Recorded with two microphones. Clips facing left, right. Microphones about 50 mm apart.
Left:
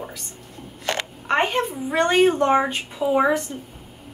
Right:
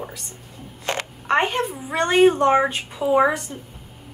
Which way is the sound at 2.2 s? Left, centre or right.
Right.